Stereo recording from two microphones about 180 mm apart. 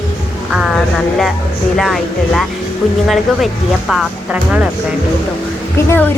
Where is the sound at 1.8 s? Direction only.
Centre (ahead or behind).